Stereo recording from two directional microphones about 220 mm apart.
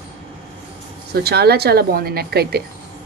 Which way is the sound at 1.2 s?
45° right (ahead or behind).